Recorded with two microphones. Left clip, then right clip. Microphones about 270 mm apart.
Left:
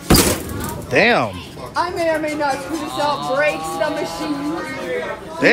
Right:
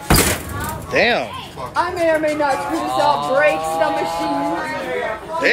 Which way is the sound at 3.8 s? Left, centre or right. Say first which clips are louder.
Right 2 dB; right.